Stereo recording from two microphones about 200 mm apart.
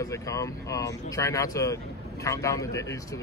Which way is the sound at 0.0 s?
15° left (ahead or behind).